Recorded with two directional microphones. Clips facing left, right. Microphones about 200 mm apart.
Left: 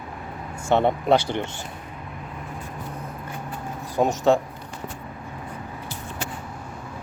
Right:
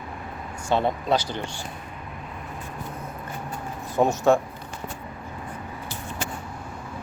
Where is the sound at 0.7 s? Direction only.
20° left (ahead or behind).